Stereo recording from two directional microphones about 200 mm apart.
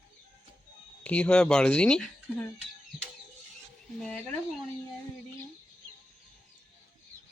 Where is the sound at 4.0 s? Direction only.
5° left (ahead or behind).